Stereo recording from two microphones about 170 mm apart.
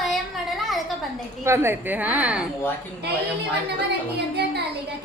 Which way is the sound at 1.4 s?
15° right (ahead or behind).